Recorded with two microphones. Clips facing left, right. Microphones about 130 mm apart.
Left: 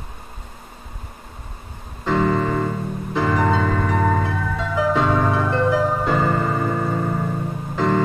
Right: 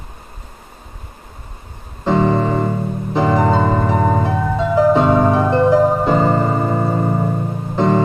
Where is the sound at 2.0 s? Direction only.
30° right (ahead or behind).